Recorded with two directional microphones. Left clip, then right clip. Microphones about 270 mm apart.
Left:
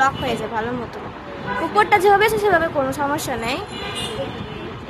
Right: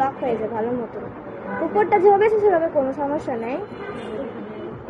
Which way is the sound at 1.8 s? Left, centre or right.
Centre.